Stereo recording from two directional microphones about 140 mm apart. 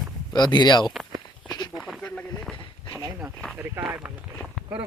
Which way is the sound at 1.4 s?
30° left (ahead or behind).